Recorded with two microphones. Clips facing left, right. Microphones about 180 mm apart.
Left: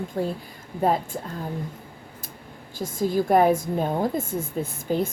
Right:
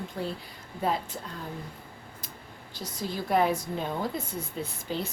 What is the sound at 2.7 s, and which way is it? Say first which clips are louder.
Speech: left 11 dB; 50° left (ahead or behind).